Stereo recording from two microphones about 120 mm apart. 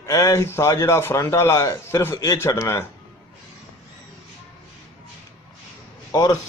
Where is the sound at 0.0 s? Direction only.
25° left (ahead or behind).